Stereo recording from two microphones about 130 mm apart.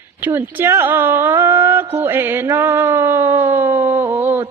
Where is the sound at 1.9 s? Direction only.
20° right (ahead or behind).